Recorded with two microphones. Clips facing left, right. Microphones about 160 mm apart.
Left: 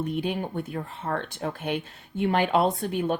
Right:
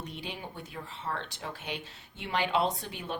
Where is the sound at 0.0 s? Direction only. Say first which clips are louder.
Left 12 dB; 55° left (ahead or behind).